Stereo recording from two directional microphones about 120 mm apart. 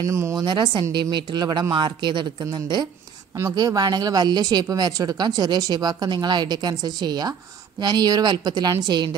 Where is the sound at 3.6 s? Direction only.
35° right (ahead or behind).